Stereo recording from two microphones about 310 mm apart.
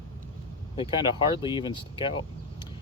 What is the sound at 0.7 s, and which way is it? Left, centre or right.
Speech, centre.